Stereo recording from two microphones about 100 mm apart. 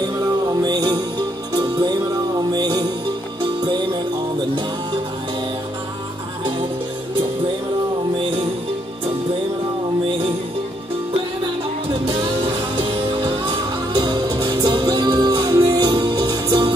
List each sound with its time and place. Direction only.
0.6 s music: 40° right (ahead or behind)
12.1 s music: 70° right (ahead or behind)
13.9 s music: 45° right (ahead or behind)